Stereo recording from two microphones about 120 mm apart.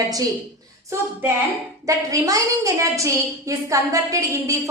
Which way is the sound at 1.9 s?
30° right (ahead or behind).